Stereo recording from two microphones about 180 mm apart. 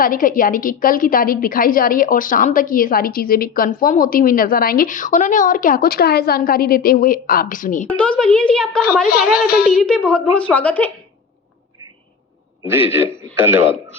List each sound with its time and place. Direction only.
0.0 s a woman's voice: 50° left (ahead or behind)
7.9 s a woman's voice: 5° left (ahead or behind)
9.3 s child singing: 60° left (ahead or behind)
9.7 s a woman's voice: 5° left (ahead or behind)
13.3 s speech: 10° right (ahead or behind)